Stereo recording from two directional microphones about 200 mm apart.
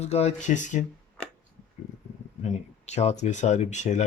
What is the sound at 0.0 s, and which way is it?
Speech, 35° left (ahead or behind).